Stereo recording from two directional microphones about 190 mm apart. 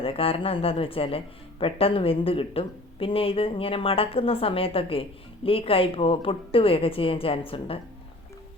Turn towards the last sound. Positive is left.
turn(degrees=30)  # may be behind; listen again after turning